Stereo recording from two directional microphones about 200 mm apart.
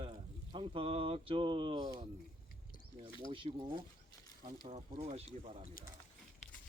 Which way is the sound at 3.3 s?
25° right (ahead or behind).